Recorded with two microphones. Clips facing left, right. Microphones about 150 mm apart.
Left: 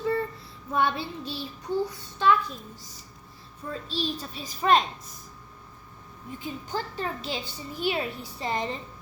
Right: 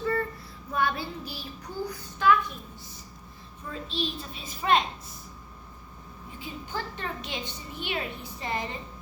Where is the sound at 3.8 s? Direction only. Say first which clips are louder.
Left 1 dB; 40° left (ahead or behind).